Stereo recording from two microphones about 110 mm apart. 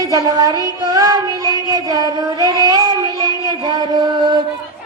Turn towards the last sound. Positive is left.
turn(degrees=-40)  # may be behind; listen again after turning